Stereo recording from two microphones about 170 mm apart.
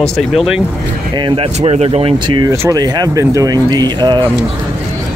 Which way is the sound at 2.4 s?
20° right (ahead or behind).